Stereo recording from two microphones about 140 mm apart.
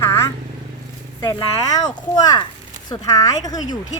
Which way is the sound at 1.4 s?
30° left (ahead or behind).